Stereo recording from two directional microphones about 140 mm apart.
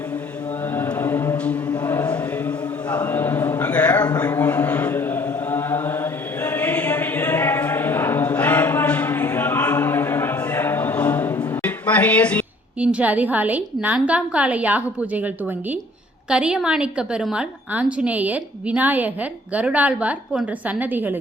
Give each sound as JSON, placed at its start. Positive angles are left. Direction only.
{"t": 0.8, "sound": "mantra", "side_deg": 15}
{"t": 1.6, "sound": "chant", "side_deg": 25}
{"t": 2.9, "sound": "a sound", "side_deg": 15}
{"t": 4.4, "sound": "chant", "side_deg": 15}
{"t": 11.6, "sound": "a sound", "side_deg": 10}
{"t": 12.8, "sound": "a woman's voice", "side_deg": -10}
{"t": 16.3, "sound": "a woman's voice", "side_deg": -5}